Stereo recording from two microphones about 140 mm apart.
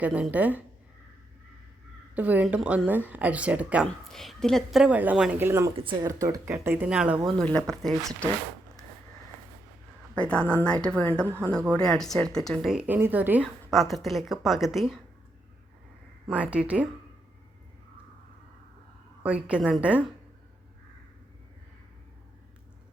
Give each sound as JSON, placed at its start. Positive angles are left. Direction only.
{"t": 0.0, "sound": "speech", "side_deg": -10}
{"t": 2.1, "sound": "speech", "side_deg": -10}
{"t": 3.8, "sound": "speech", "side_deg": 0}
{"t": 5.4, "sound": "speech", "side_deg": -20}
{"t": 5.7, "sound": "speech", "side_deg": -35}
{"t": 6.1, "sound": "speech", "side_deg": -25}
{"t": 7.3, "sound": "speech", "side_deg": 5}
{"t": 10.2, "sound": "a woman's voice", "side_deg": 10}
{"t": 11.3, "sound": "speech", "side_deg": -15}
{"t": 11.7, "sound": "speech", "side_deg": 5}
{"t": 13.4, "sound": "speech", "side_deg": 0}
{"t": 16.2, "sound": "speech", "side_deg": -10}
{"t": 19.2, "sound": "speech", "side_deg": -10}